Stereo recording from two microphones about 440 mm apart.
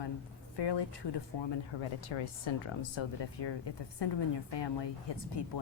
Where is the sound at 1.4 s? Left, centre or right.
Left.